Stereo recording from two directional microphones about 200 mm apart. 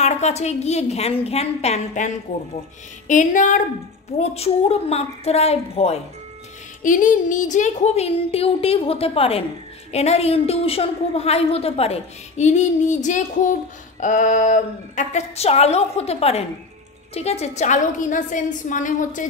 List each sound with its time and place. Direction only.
0.0 s a woman's voice: 35° left (ahead or behind)